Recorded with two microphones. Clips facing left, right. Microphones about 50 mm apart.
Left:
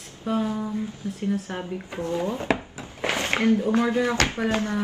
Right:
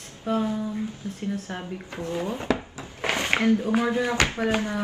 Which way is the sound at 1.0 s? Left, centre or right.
Left.